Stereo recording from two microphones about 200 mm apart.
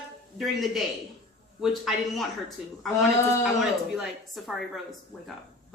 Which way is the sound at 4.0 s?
Centre (ahead or behind).